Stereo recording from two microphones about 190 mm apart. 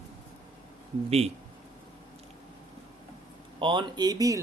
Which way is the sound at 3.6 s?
25° right (ahead or behind).